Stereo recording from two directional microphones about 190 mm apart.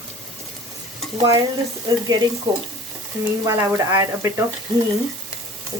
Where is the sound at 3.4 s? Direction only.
15° right (ahead or behind).